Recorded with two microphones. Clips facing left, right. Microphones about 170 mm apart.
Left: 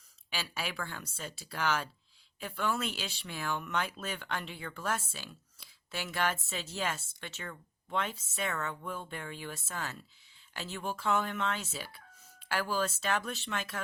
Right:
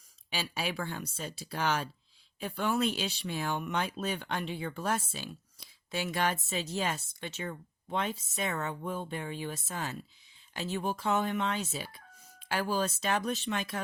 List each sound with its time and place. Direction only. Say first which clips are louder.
0.3 s speech: right 4 dB; 20° right (ahead or behind)